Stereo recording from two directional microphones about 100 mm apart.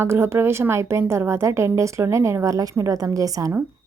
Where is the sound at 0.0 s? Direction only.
25° right (ahead or behind).